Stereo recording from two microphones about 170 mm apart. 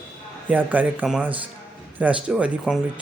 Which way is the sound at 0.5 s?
10° right (ahead or behind).